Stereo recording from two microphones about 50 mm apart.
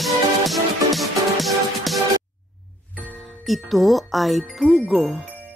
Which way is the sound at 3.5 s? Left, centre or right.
Centre.